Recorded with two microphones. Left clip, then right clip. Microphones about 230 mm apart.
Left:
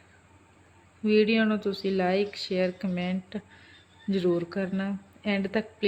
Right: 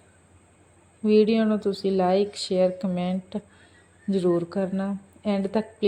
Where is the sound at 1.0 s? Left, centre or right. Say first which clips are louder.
Right 3 dB; centre.